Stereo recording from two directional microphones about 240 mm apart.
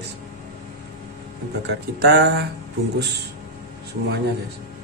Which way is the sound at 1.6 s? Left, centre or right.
Right.